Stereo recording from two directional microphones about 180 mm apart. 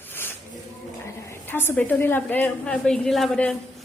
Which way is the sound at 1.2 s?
15° left (ahead or behind).